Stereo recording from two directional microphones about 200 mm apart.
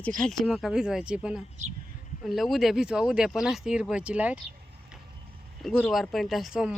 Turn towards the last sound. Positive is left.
turn(degrees=0)  # may be behind; listen again after turning